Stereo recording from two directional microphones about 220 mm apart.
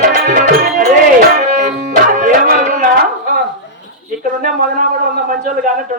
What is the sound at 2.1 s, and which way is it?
Tabla, 40° right (ahead or behind).